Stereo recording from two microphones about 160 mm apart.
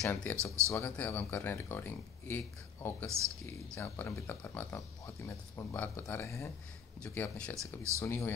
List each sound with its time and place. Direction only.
0.1 s speech: 10° left (ahead or behind)
7.0 s speech: 5° left (ahead or behind)
7.5 s speech: 20° right (ahead or behind)
8.0 s speech: 15° left (ahead or behind)